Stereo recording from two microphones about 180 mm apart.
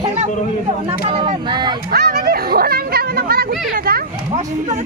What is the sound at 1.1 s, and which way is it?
Speech, 30° right (ahead or behind).